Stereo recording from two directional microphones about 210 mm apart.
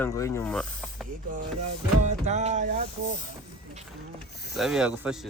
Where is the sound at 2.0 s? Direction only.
35° right (ahead or behind).